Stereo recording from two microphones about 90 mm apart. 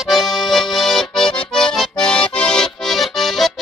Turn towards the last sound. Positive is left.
turn(degrees=0)  # may be behind; listen again after turning